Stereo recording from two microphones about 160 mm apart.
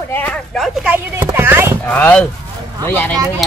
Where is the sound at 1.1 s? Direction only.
15° right (ahead or behind).